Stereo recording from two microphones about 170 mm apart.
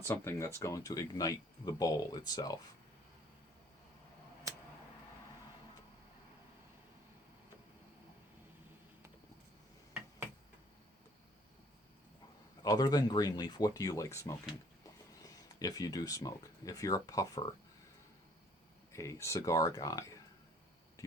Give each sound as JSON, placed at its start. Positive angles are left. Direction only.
{"t": 0.0, "sound": "speech", "side_deg": 15}
{"t": 12.6, "sound": "speech", "side_deg": 25}
{"t": 18.9, "sound": "speech", "side_deg": 15}